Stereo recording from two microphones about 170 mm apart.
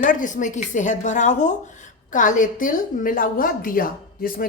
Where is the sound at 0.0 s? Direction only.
50° left (ahead or behind).